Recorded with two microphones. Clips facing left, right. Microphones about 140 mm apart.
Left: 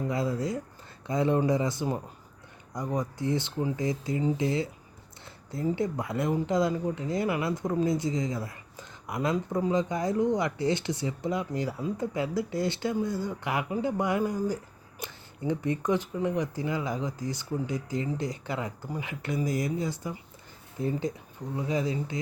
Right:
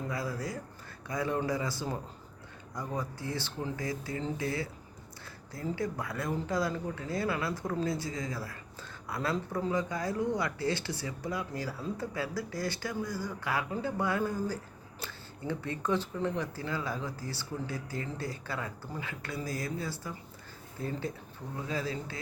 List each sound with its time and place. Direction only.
0.1 s speech: 25° left (ahead or behind)